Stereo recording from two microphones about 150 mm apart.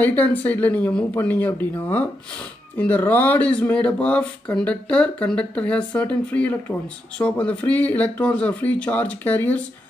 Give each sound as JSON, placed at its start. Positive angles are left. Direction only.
{"t": 0.0, "sound": "speech", "side_deg": 10}